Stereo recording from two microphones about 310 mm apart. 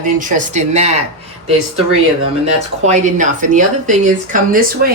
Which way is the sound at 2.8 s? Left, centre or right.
Right.